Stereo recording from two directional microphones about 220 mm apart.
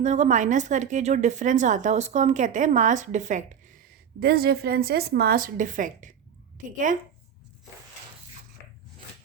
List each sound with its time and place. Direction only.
0.0 s a woman's voice: 30° right (ahead or behind)